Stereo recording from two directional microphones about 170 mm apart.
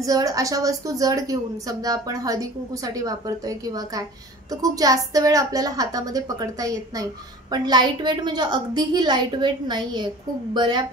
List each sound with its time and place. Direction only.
0.0 s a woman's voice: 20° right (ahead or behind)